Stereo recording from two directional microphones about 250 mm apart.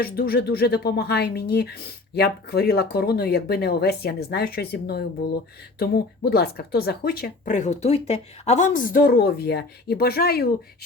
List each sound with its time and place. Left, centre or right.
0.0 s speech: left